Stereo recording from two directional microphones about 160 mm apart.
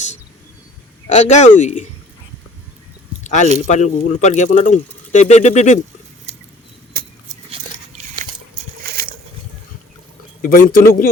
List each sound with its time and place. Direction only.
1.0 s speech: 45° left (ahead or behind)
3.2 s speech: 50° left (ahead or behind)
6.3 s a sound: 45° right (ahead or behind)
6.9 s vehicle: 70° right (ahead or behind)
10.4 s speech: 60° left (ahead or behind)